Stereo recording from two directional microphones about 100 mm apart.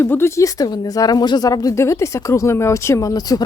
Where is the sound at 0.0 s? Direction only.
25° left (ahead or behind).